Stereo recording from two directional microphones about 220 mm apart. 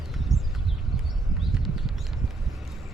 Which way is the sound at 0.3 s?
15° right (ahead or behind).